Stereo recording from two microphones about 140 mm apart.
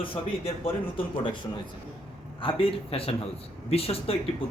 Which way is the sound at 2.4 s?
40° left (ahead or behind).